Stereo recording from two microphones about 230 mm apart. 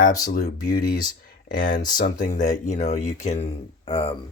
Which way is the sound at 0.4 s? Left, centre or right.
Left.